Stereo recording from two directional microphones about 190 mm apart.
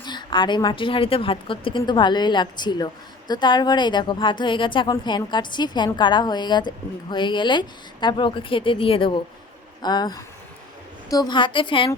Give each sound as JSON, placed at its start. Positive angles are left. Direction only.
{"t": 0.0, "sound": "a woman's voice", "side_deg": 25}